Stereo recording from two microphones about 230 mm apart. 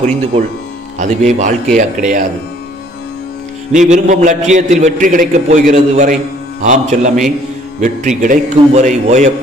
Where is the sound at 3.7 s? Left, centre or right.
Right.